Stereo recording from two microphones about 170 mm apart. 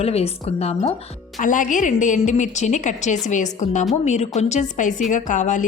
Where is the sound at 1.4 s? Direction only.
50° left (ahead or behind).